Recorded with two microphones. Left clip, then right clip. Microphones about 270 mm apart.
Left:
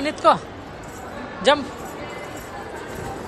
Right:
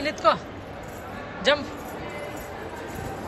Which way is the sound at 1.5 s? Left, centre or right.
Centre.